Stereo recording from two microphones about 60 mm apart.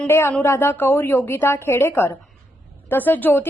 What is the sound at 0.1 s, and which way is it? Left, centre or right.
A woman's voice, left.